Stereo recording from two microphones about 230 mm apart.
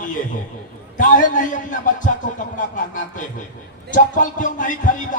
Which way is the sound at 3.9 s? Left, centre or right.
Left.